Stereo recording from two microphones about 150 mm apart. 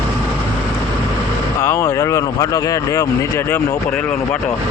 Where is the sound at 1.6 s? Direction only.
20° left (ahead or behind).